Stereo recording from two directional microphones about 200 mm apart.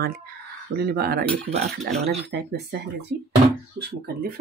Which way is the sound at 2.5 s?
55° right (ahead or behind).